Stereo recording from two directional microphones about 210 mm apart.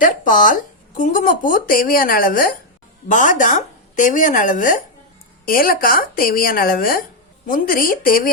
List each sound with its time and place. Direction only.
0.0 s speech: 40° left (ahead or behind)